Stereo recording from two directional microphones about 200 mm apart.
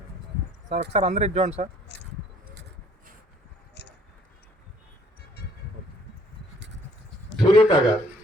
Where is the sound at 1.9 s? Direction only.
60° left (ahead or behind).